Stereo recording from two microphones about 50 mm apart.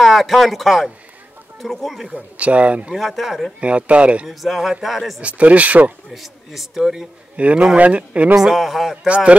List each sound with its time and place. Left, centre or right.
0.0 s speech: centre
2.1 s speech: right
2.9 s speech: centre
3.6 s speech: right
4.3 s speech: centre
5.2 s speech: right
6.1 s speech: centre
7.3 s speech: right
8.4 s speech: centre
9.0 s speech: right